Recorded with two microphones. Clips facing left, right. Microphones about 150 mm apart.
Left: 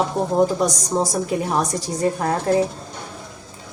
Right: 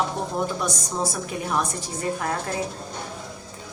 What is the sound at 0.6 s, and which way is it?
A woman's voice, 35° left (ahead or behind).